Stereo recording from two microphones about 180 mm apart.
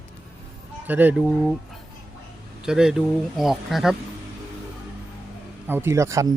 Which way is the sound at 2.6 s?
5° right (ahead or behind).